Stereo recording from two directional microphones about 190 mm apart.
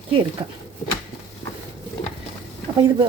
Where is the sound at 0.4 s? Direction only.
25° right (ahead or behind).